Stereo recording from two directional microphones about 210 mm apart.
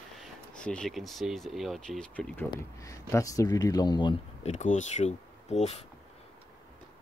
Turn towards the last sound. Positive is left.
turn(degrees=30)  # may be behind; listen again after turning